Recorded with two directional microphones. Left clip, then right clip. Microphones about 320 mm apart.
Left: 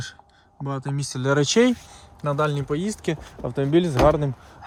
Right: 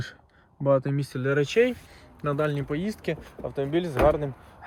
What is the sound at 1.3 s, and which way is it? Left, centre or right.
Speech, left.